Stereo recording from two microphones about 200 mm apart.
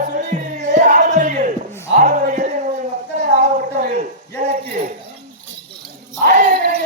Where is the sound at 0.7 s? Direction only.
40° right (ahead or behind).